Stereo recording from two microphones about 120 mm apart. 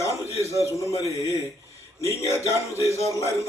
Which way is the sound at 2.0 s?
25° left (ahead or behind).